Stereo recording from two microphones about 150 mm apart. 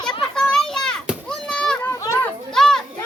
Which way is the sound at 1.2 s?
5° left (ahead or behind).